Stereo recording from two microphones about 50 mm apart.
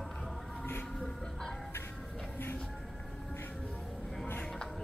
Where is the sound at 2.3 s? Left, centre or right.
Left.